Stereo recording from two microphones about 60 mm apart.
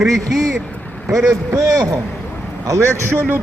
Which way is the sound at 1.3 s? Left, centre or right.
Right.